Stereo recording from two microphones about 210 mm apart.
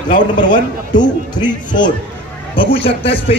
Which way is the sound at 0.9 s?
20° left (ahead or behind).